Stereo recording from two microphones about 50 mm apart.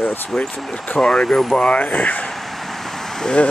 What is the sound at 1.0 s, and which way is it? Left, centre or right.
Speech, centre.